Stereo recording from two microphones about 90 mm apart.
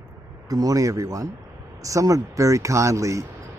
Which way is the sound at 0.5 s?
40° right (ahead or behind).